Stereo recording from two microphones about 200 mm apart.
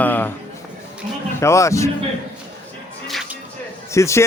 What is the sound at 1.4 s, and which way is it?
Speech, 15° left (ahead or behind).